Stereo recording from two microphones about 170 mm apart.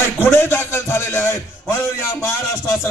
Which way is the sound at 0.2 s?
15° left (ahead or behind).